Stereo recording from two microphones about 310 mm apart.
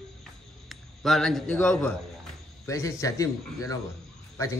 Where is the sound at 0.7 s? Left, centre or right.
Centre.